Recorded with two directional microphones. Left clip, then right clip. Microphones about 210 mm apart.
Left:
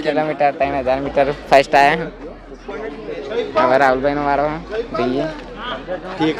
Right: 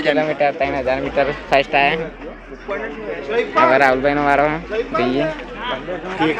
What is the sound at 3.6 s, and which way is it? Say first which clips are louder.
Speech: even; 10° left (ahead or behind).